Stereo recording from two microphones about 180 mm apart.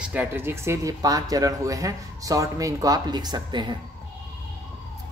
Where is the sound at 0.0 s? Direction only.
10° right (ahead or behind).